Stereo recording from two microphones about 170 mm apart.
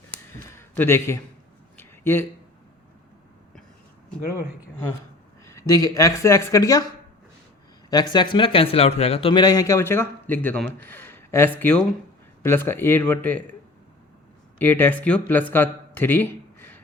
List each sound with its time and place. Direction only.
0.1 s a sound: 10° left (ahead or behind)
5.5 s speech: 20° left (ahead or behind)
7.9 s speech: 25° left (ahead or behind); by 13.6 s 10° left (ahead or behind)
14.6 s speech: 10° left (ahead or behind)